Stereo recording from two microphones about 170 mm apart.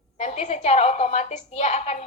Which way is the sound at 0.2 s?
45° left (ahead or behind).